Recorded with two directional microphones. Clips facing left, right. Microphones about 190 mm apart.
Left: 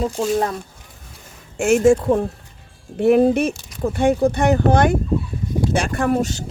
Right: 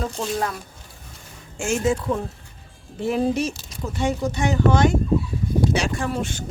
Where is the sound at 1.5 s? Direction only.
60° left (ahead or behind).